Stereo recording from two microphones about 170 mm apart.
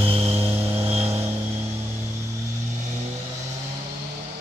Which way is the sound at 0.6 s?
15° right (ahead or behind).